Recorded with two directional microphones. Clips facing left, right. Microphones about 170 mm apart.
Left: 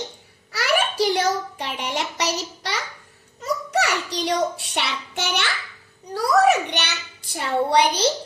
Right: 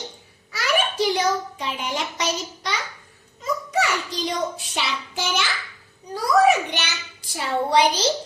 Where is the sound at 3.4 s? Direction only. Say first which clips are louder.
Left 1 dB; 75° left (ahead or behind).